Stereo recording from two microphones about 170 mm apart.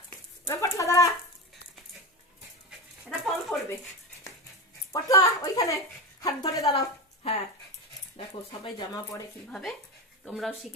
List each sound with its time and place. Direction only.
0.4 s speech: 20° left (ahead or behind)
2.6 s dog: centre (ahead or behind)
4.9 s speech: 20° left (ahead or behind)
8.6 s speech: 25° left (ahead or behind)
9.5 s speech: 5° left (ahead or behind)